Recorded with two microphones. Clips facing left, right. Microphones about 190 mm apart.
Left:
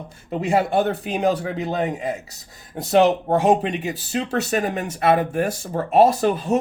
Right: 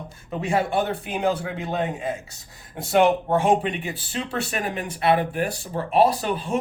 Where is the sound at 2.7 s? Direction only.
40° left (ahead or behind).